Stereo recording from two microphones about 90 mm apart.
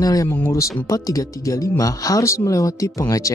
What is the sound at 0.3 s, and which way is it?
Speech, 30° left (ahead or behind).